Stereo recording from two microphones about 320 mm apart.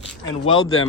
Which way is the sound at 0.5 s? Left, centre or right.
Left.